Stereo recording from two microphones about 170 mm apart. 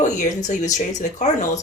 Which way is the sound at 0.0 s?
45° left (ahead or behind).